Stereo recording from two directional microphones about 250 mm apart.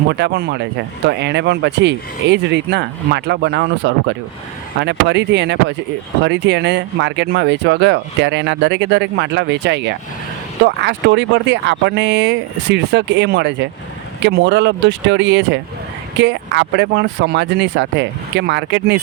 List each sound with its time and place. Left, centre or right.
0.1 s speech: right